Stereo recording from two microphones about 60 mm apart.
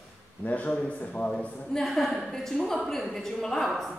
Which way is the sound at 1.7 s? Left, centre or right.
Centre.